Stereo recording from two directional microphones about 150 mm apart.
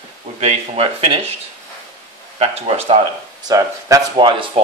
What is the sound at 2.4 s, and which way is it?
Speech, 40° right (ahead or behind).